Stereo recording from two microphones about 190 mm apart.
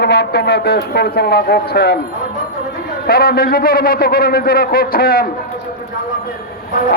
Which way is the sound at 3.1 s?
50° left (ahead or behind).